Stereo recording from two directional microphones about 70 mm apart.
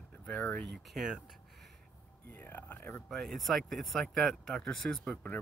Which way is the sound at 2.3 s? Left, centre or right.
Left.